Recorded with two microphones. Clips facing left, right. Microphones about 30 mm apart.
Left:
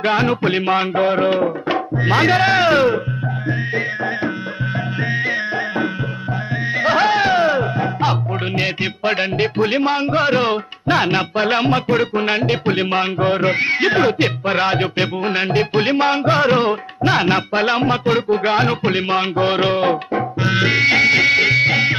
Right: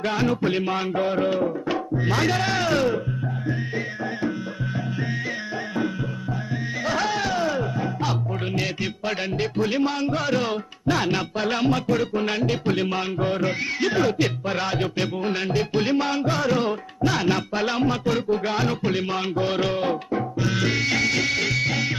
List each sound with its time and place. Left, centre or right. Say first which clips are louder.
0.0 s music: left 6 dB; left
6.8 s music: left 9 dB; left